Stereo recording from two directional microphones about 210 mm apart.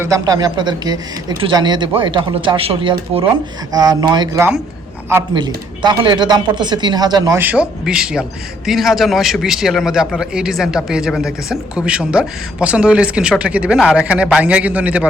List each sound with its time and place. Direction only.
0.0 s speech: 15° right (ahead or behind)
5.8 s speech: 20° right (ahead or behind)